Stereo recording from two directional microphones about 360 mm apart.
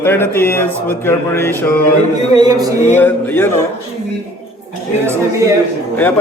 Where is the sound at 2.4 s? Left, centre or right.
Centre.